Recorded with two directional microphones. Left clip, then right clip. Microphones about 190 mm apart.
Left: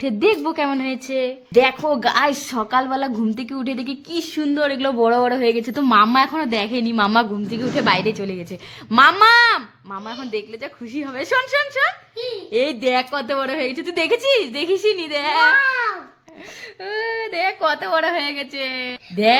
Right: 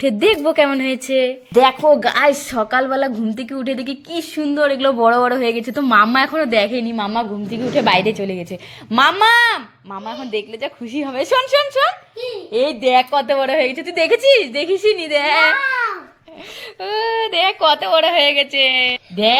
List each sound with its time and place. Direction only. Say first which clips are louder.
0.0 s a woman's voice: right 4 dB; 5° right (ahead or behind)
6.9 s a woman's voice: left 4 dB; 25° left (ahead or behind)
7.5 s a woman's voice: right 4 dB; centre (ahead or behind)
12.5 s a woman's voice: right 4 dB; 10° left (ahead or behind)
16.8 s a woman's voice: right 5 dB; 5° right (ahead or behind)
17.4 s a woman's voice: right 4 dB; 5° left (ahead or behind)
18.1 s a woman's voice: right 9 dB; 35° left (ahead or behind)